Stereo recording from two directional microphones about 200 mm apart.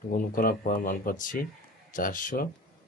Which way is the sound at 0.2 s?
45° left (ahead or behind).